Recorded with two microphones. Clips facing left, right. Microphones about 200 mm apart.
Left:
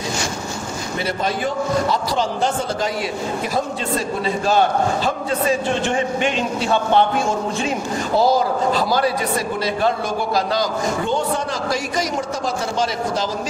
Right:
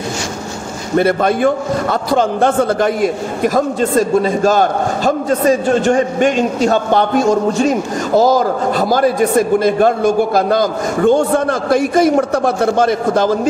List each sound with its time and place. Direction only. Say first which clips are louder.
0.9 s a man's voice: right 11 dB; 55° right (ahead or behind)